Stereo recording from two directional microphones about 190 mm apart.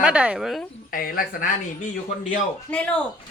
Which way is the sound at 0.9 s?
50° left (ahead or behind).